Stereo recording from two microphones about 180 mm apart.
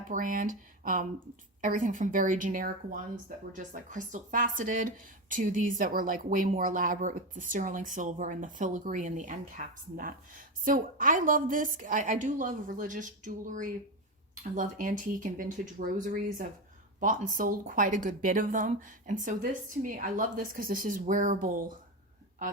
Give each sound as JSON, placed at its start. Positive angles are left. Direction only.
{"t": 0.1, "sound": "speech", "side_deg": -50}